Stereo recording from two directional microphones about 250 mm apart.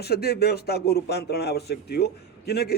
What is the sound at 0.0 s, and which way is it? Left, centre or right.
Speech, left.